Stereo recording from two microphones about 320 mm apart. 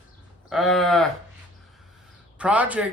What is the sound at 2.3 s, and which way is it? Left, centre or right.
Speech, centre.